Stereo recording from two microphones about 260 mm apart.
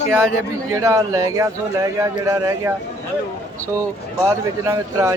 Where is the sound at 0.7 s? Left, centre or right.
Centre.